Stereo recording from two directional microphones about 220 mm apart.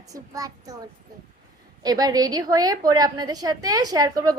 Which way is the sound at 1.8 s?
15° right (ahead or behind).